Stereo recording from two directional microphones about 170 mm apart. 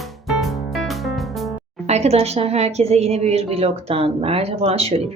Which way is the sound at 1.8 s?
40° right (ahead or behind).